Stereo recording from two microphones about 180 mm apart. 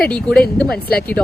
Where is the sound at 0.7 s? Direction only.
60° left (ahead or behind).